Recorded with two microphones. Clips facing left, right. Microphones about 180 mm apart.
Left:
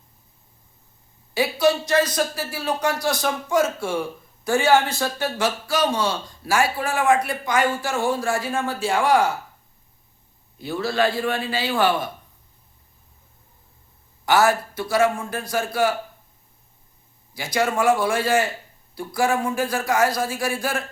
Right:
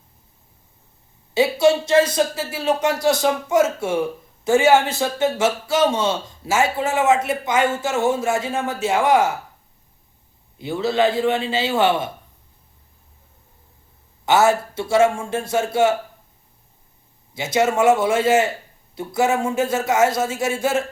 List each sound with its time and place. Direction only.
1.3 s a man's voice: 25° right (ahead or behind)
10.6 s a man's voice: 20° right (ahead or behind)
14.3 s a man's voice: 25° right (ahead or behind)
17.3 s a man's voice: 25° right (ahead or behind)